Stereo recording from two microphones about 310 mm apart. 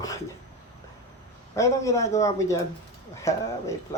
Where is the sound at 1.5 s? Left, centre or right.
Centre.